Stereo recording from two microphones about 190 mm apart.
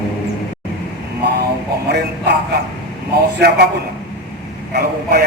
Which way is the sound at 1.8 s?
60° right (ahead or behind).